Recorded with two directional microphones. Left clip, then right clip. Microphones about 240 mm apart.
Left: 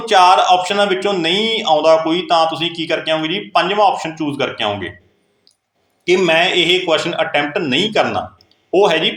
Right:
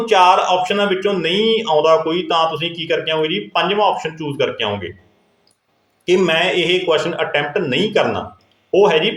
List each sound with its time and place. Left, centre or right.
0.0 s speech: centre
6.1 s speech: left